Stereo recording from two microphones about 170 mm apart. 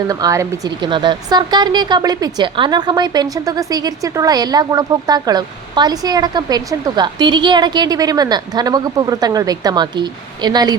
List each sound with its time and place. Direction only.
0.1 s speech: 20° right (ahead or behind)